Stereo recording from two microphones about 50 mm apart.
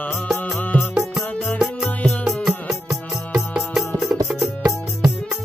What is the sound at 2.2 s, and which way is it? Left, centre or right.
Music, centre.